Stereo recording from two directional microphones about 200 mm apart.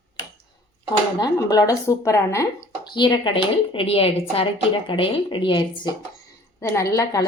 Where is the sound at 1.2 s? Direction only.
20° left (ahead or behind).